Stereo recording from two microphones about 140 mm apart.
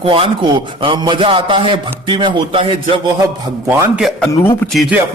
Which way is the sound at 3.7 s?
5° right (ahead or behind).